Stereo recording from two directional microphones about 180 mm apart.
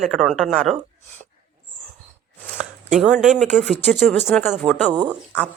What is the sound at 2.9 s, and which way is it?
Speech, 5° right (ahead or behind).